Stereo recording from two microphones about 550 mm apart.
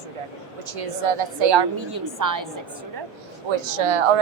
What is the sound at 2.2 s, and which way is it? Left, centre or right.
Speech, right.